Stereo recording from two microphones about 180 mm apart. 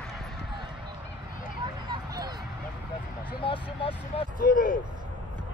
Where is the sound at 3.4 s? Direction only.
30° left (ahead or behind).